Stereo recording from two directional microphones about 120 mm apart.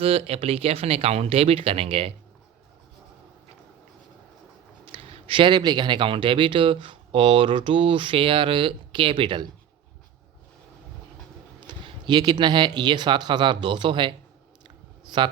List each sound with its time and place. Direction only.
0.0 s speech: 55° right (ahead or behind)
4.9 s speech: 55° right (ahead or behind)
11.6 s speech: 40° right (ahead or behind)